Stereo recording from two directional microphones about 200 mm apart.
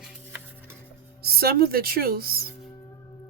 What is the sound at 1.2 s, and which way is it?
Speech, 50° right (ahead or behind).